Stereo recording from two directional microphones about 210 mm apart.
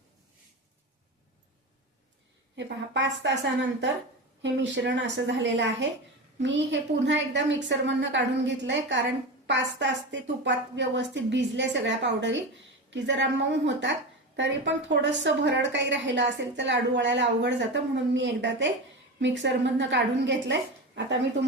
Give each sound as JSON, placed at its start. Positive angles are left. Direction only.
{"t": 2.6, "sound": "a woman's voice", "side_deg": -60}